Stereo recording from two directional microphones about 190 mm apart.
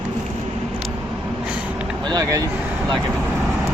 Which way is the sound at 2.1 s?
20° right (ahead or behind).